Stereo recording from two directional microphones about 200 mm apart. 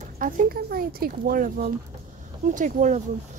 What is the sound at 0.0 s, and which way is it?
Speech, 40° right (ahead or behind).